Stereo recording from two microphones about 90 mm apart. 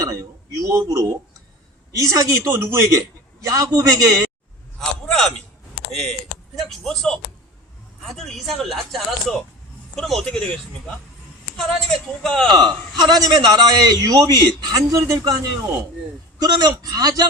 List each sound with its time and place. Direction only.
0.0 s a man's voice: 40° right (ahead or behind)
4.8 s a sound: 5° left (ahead or behind)
5.9 s speech: centre (ahead or behind)
11.5 s speech: 10° left (ahead or behind)
12.5 s a man's voice: 55° right (ahead or behind)